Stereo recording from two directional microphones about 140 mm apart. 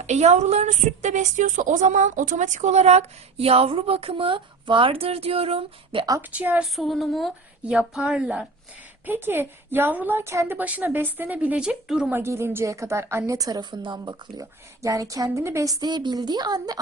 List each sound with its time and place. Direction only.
0.0 s a woman's voice: 55° right (ahead or behind)
6.1 s a woman's voice: 20° right (ahead or behind)
6.7 s a woman's voice: centre (ahead or behind)
9.0 s a woman's voice: 15° right (ahead or behind)
12.2 s a woman's voice: 20° right (ahead or behind)